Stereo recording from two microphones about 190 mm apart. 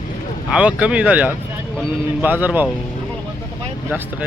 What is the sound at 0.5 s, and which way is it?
Speech, 5° right (ahead or behind).